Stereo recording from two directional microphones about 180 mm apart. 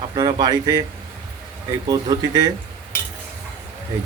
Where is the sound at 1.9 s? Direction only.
20° right (ahead or behind).